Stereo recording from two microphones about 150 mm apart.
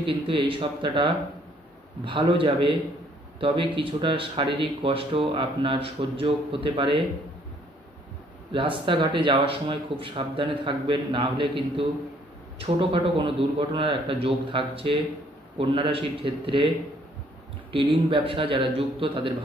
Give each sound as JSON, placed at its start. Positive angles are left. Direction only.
{"t": 0.0, "sound": "speech", "side_deg": -35}
{"t": 8.5, "sound": "speech", "side_deg": -35}
{"t": 17.7, "sound": "speech", "side_deg": -35}